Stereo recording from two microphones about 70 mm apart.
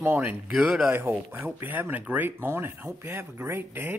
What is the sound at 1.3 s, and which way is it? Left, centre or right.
Speech, right.